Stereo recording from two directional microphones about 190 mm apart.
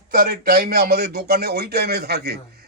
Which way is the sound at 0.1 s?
50° right (ahead or behind).